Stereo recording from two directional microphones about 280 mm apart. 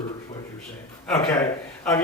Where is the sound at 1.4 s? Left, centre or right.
Centre.